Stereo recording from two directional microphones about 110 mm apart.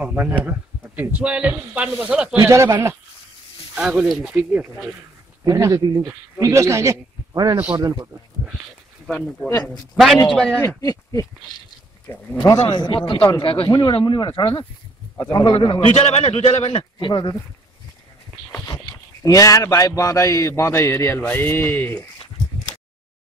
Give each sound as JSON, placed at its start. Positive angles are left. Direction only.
{"t": 0.0, "sound": "speech", "side_deg": -15}
{"t": 2.4, "sound": "speech", "side_deg": -25}
{"t": 3.7, "sound": "speech", "side_deg": -10}
{"t": 5.4, "sound": "a man's voice", "side_deg": -35}
{"t": 7.5, "sound": "speech", "side_deg": -15}
{"t": 7.8, "sound": "speech", "side_deg": -40}
{"t": 9.0, "sound": "speech", "side_deg": 10}
{"t": 10.8, "sound": "speech", "side_deg": 30}
{"t": 12.4, "sound": "a man's voice", "side_deg": 45}
{"t": 15.9, "sound": "a man's voice", "side_deg": 70}
{"t": 17.0, "sound": "a man's voice", "side_deg": 45}
{"t": 19.2, "sound": "a man's voice", "side_deg": 30}